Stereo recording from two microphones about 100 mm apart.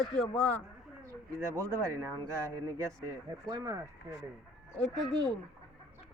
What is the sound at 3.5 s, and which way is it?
Speech, 35° right (ahead or behind).